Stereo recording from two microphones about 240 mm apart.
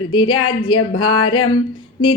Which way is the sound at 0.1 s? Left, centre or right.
Left.